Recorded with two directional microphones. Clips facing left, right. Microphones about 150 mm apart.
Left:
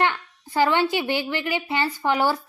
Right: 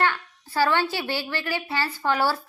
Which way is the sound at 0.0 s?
20° left (ahead or behind).